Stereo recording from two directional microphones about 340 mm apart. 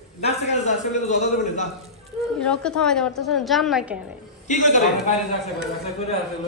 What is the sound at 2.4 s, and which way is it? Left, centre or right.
A woman's voice, centre.